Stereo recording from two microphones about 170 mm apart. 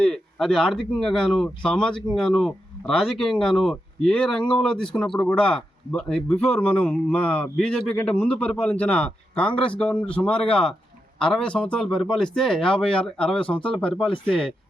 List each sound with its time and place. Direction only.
0.0 s speech: 5° left (ahead or behind)
6.4 s speech: 35° left (ahead or behind)
6.7 s speech: 10° left (ahead or behind)